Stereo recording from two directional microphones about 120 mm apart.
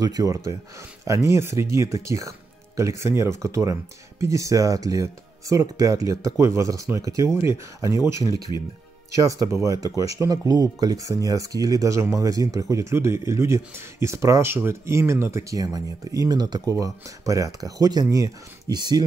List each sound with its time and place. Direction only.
0.0 s speech: 30° right (ahead or behind)
9.2 s speech: 30° right (ahead or behind)